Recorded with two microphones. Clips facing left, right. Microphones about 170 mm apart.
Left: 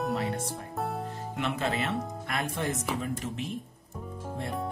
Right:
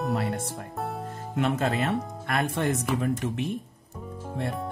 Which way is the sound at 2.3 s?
65° right (ahead or behind).